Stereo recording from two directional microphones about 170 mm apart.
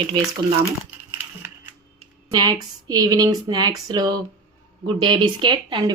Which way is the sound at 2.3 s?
25° right (ahead or behind).